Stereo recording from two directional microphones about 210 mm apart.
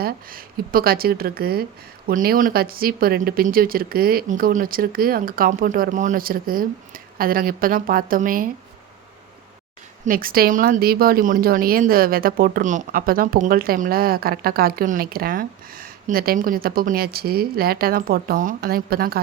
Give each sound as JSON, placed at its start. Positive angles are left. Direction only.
{"t": 0.0, "sound": "speech", "side_deg": -45}
{"t": 10.1, "sound": "speech", "side_deg": -45}